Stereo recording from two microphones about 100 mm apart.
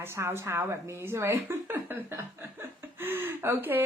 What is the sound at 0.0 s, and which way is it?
A woman's voice, 25° right (ahead or behind).